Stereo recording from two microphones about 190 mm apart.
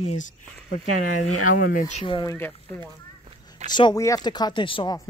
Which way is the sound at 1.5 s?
45° left (ahead or behind).